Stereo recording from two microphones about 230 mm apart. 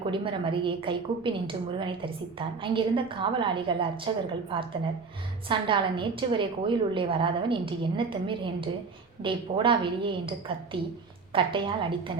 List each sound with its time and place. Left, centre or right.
0.0 s a woman's voice: right